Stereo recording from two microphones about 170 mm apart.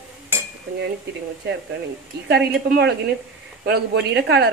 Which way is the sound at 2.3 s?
85° right.